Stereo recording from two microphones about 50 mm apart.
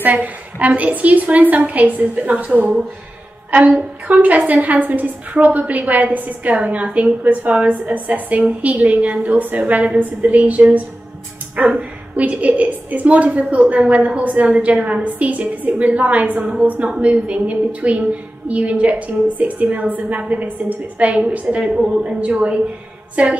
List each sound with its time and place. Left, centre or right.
0.0 s a woman's voice: right